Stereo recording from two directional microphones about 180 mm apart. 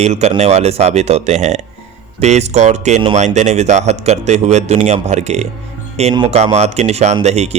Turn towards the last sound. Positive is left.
turn(degrees=-40)  # may be behind; listen again after turning